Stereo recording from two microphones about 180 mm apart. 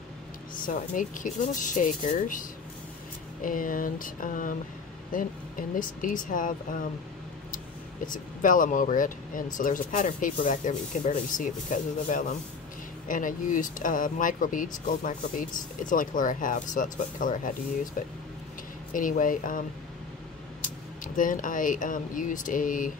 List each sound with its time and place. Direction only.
0.7 s speech: 45° left (ahead or behind)
3.4 s speech: 50° left (ahead or behind)
18.9 s speech: 50° left (ahead or behind)
21.0 s speech: 50° left (ahead or behind)